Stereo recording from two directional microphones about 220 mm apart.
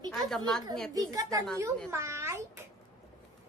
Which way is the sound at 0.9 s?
15° right (ahead or behind).